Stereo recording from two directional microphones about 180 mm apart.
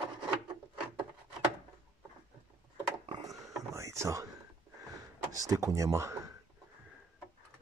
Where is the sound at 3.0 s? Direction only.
30° right (ahead or behind).